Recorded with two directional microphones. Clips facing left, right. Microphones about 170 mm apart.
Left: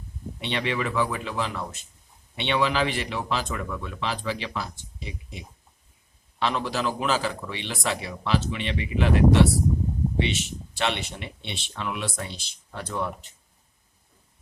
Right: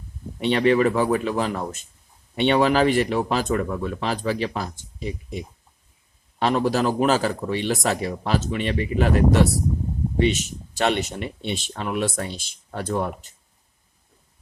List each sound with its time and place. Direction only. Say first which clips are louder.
0.3 s speech: right 10 dB; 45° right (ahead or behind)